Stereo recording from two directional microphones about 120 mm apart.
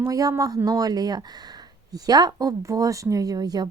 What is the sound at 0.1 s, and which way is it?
Speech, 30° right (ahead or behind).